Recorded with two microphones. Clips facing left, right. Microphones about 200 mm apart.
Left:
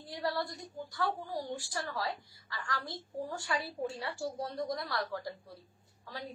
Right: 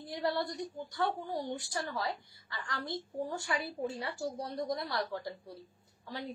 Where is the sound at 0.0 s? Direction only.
25° right (ahead or behind).